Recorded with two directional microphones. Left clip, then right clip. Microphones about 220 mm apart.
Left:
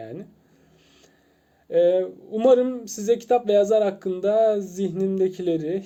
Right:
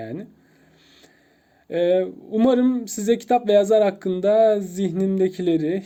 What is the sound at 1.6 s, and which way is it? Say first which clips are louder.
Speech: left 1 dB; 35° right (ahead or behind).